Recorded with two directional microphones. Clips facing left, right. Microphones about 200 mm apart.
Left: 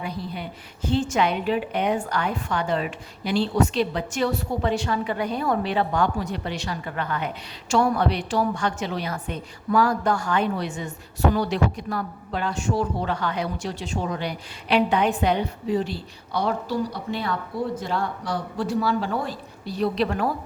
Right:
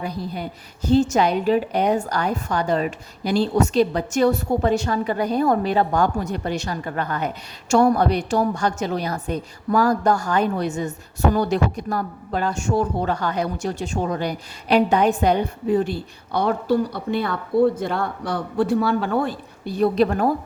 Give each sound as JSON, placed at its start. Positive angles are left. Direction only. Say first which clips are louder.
{"t": 0.0, "sound": "a woman's voice", "louder": "right 3 dB", "side_deg": -40}